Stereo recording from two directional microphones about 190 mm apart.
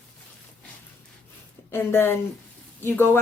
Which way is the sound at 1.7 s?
10° left (ahead or behind).